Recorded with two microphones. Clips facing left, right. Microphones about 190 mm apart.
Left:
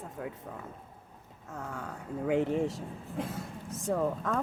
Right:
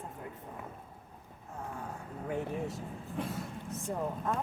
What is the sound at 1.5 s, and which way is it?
Speech, 80° left.